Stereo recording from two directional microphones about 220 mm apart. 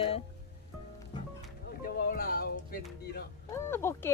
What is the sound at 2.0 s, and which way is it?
Speech, 40° left (ahead or behind).